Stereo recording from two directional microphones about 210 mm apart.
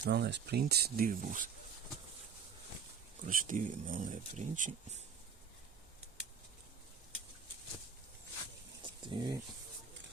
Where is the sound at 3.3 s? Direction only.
40° right (ahead or behind).